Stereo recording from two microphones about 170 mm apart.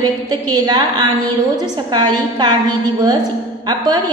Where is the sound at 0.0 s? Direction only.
25° right (ahead or behind).